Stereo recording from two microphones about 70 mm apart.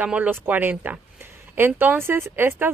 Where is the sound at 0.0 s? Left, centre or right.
Right.